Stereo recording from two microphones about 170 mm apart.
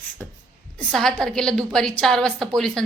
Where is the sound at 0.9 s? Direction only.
5° left (ahead or behind).